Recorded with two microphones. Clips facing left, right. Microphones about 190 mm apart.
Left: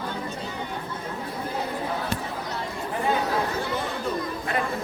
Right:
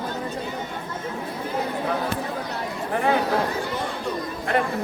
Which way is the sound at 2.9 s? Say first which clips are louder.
Right 4 dB; 65° right (ahead or behind).